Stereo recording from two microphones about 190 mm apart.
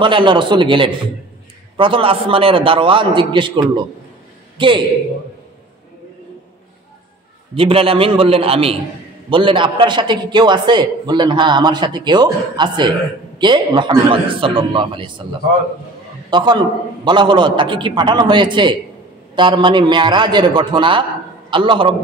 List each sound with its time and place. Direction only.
0.0 s a man's voice: 25° right (ahead or behind)
4.6 s a man's voice: 25° right (ahead or behind)
7.5 s a man's voice: 30° right (ahead or behind)
16.3 s a man's voice: 25° right (ahead or behind)